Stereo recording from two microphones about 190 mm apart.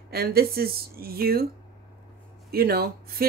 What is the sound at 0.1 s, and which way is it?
A woman's voice, 55° right (ahead or behind).